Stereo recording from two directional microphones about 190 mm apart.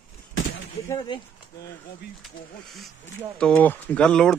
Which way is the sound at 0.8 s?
20° left (ahead or behind).